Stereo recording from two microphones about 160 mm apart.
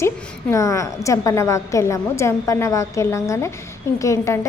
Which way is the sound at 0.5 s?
20° left (ahead or behind).